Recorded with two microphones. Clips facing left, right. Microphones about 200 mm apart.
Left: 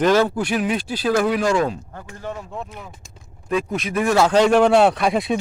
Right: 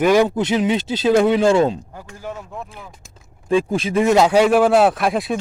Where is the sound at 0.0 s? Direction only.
15° right (ahead or behind).